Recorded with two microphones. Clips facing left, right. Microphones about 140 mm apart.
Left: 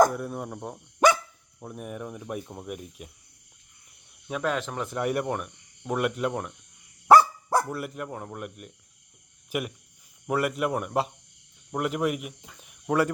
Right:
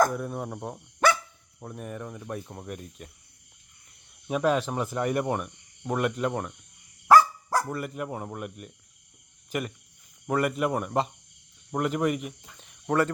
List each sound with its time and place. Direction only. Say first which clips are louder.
0.1 s speech: right 1 dB; centre (ahead or behind)
0.9 s dog: left 3 dB; 15° left (ahead or behind)
1.5 s speech: left 1 dB; 5° left (ahead or behind)
4.3 s speech: right 4 dB; 15° right (ahead or behind)
4.9 s speech: even; centre (ahead or behind)
7.1 s dog: left 1 dB; 20° left (ahead or behind)
7.7 s speech: right 1 dB; 5° left (ahead or behind)